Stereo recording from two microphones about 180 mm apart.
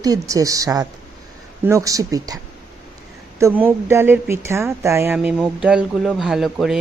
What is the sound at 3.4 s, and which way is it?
A woman's voice, 15° right (ahead or behind).